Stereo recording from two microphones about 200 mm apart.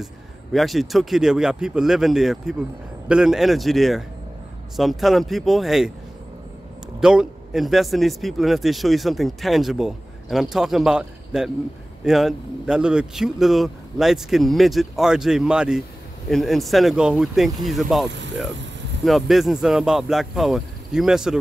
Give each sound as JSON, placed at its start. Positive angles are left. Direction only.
{"t": 0.0, "sound": "speech", "side_deg": 0}
{"t": 7.0, "sound": "speech", "side_deg": -5}
{"t": 18.1, "sound": "speech", "side_deg": -65}
{"t": 19.0, "sound": "speech", "side_deg": 0}